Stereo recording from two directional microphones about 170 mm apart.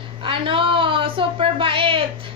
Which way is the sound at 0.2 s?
30° right (ahead or behind).